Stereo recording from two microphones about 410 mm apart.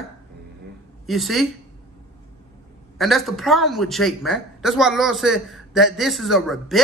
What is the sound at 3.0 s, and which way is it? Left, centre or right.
Speech, centre.